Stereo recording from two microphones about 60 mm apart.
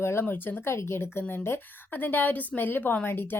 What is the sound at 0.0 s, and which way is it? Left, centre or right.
A woman's voice, left.